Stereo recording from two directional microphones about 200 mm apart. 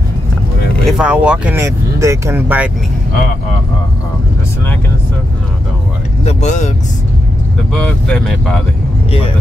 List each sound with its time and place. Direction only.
0.8 s speech: 5° right (ahead or behind)
6.2 s speech: 35° left (ahead or behind)
7.7 s speech: 5° left (ahead or behind)